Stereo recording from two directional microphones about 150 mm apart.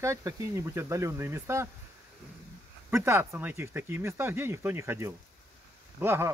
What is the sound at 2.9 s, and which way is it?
Speech, 15° right (ahead or behind).